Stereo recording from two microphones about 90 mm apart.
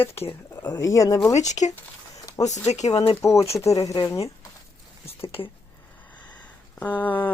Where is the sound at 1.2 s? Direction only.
25° left (ahead or behind).